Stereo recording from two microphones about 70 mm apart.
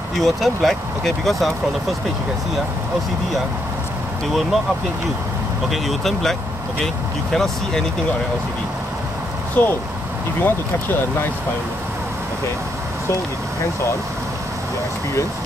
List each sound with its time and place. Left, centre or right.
0.2 s speech: centre
4.3 s speech: centre
5.7 s speech: centre
7.3 s speech: centre
9.6 s speech: left
13.1 s speech: left